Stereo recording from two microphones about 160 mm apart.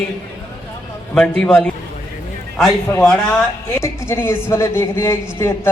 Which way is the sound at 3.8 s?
15° left (ahead or behind).